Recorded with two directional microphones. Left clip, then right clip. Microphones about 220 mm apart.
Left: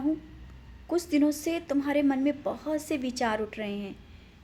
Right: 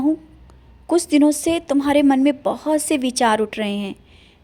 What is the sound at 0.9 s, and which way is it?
A woman's voice, 35° right (ahead or behind).